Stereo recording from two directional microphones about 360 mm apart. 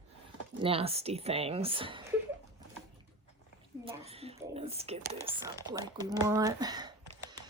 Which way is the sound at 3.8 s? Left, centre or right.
Centre.